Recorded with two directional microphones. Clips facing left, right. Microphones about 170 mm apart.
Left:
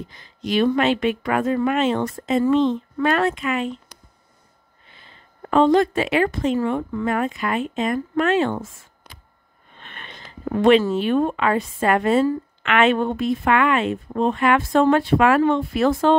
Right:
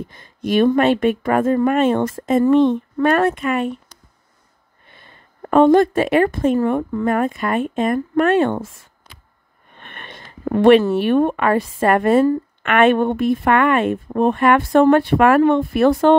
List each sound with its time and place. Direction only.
0.0 s a woman's voice: 50° right (ahead or behind)
5.4 s a woman's voice: 50° right (ahead or behind)
10.5 s a woman's voice: 60° right (ahead or behind)